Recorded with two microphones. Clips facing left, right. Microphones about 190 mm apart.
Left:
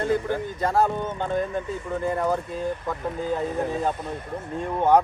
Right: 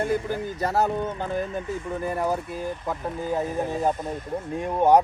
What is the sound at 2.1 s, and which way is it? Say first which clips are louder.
Speech: left 1 dB; 10° right (ahead or behind).